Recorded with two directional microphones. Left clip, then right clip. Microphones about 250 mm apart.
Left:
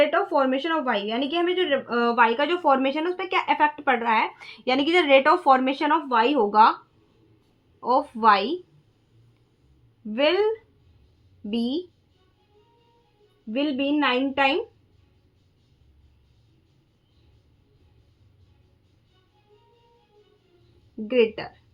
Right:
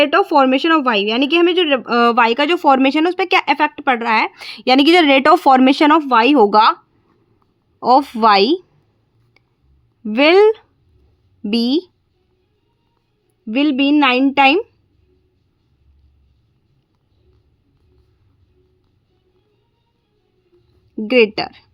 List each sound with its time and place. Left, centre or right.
0.0 s speech: right
7.8 s speech: right
10.1 s speech: right
13.5 s speech: right
21.1 s speech: right